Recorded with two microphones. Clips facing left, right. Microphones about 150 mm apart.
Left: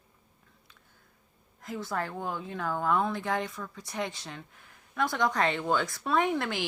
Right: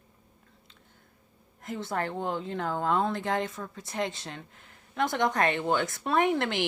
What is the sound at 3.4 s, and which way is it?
Speech, 25° right (ahead or behind).